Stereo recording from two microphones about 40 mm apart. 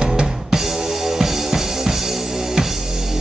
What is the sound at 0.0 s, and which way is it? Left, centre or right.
Music, centre.